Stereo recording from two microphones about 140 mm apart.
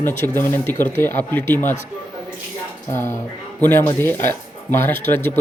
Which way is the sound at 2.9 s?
20° left (ahead or behind).